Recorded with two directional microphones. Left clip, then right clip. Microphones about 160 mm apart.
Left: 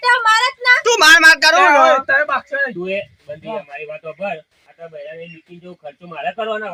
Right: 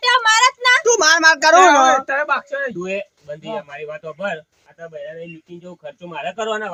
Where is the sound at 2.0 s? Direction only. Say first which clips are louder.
Left 3 dB; 60° right (ahead or behind).